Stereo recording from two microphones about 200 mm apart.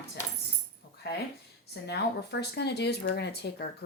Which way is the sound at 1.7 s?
55° left (ahead or behind).